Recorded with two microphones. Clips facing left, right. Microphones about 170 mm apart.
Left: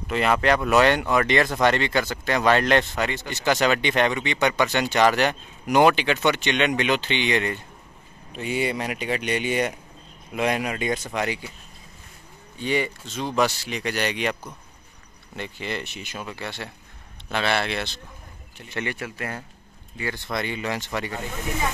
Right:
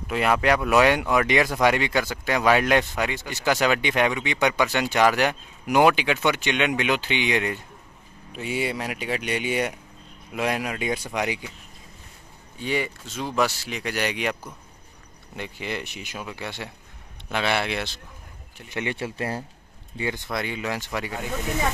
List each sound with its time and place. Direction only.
0.1 s speech: 5° right (ahead or behind)
12.5 s speech: 5° right (ahead or behind)
18.9 s speech: 30° right (ahead or behind)
20.2 s speech: 5° right (ahead or behind)